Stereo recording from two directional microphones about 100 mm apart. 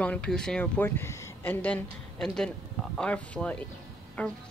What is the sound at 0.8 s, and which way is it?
A woman's voice, 25° left (ahead or behind).